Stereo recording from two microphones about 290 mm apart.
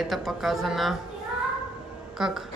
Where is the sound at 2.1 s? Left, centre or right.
Centre.